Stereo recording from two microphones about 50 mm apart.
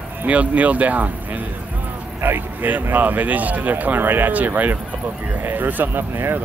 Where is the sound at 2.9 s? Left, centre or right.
Right.